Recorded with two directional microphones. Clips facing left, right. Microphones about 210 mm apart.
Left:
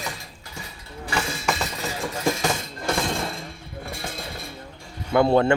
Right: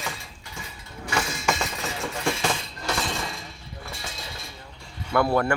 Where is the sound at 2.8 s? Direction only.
50° left (ahead or behind).